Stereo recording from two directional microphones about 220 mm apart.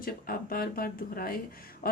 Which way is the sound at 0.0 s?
40° left (ahead or behind).